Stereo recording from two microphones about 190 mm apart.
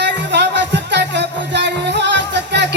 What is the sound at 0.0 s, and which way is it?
Music, 65° right (ahead or behind).